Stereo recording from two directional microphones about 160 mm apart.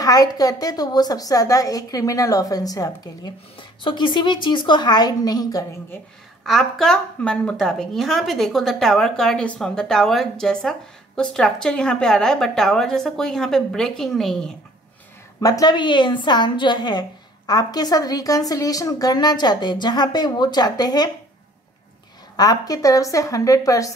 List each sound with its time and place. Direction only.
0.0 s a woman's voice: 25° left (ahead or behind)
6.4 s a woman's voice: centre (ahead or behind)
15.4 s a woman's voice: 25° left (ahead or behind)
22.4 s a woman's voice: 25° left (ahead or behind)